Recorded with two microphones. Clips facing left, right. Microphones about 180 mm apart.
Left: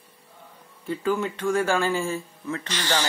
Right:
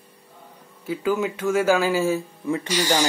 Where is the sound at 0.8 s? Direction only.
5° right (ahead or behind).